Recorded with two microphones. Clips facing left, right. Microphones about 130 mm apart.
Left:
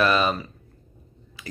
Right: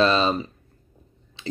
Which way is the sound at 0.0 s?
25° right (ahead or behind).